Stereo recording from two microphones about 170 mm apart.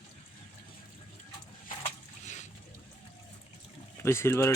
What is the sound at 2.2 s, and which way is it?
Boat, 45° left (ahead or behind).